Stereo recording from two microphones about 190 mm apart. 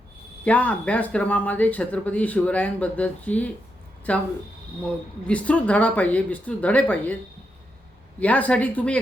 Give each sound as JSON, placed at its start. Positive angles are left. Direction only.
{"t": 0.4, "sound": "speech", "side_deg": 10}
{"t": 5.3, "sound": "speech", "side_deg": 5}
{"t": 8.2, "sound": "speech", "side_deg": 10}